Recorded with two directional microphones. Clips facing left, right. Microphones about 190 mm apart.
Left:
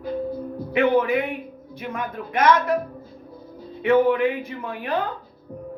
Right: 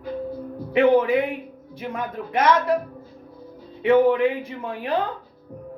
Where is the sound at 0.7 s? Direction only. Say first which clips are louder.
Right 2 dB; 30° right (ahead or behind).